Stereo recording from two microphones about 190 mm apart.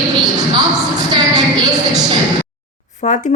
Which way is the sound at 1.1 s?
20° right (ahead or behind).